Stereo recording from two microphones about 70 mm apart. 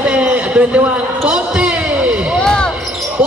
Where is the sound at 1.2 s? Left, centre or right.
Centre.